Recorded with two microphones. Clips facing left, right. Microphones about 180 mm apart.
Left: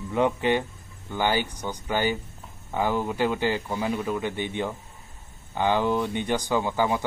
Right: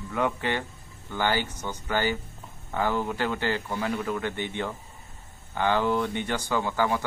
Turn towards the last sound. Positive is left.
turn(degrees=15)  # may be behind; listen again after turning